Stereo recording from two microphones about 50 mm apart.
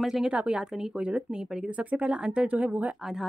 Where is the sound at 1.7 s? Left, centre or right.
Right.